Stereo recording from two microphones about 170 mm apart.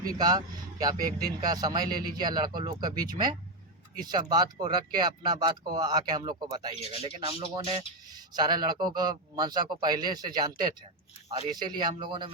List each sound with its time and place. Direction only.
0.0 s speech: 25° right (ahead or behind)
7.0 s speech: 35° right (ahead or behind)
8.1 s speech: 25° right (ahead or behind)